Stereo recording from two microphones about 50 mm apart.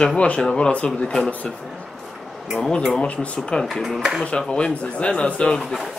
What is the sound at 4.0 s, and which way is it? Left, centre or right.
Speech, centre.